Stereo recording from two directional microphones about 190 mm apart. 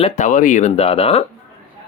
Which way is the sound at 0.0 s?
40° left (ahead or behind).